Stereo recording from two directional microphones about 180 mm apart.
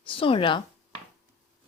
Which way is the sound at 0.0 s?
30° left (ahead or behind).